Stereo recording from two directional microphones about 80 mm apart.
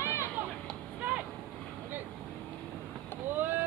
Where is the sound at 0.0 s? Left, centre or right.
Left.